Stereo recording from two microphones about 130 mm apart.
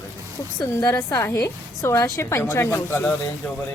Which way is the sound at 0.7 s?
30° left (ahead or behind).